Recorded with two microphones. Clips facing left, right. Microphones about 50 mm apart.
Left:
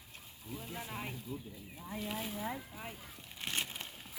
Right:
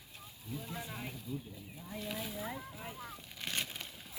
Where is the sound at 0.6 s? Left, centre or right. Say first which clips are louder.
Left 3 dB; left.